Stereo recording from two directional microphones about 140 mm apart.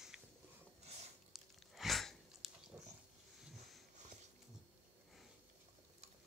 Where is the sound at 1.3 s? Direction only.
Centre (ahead or behind).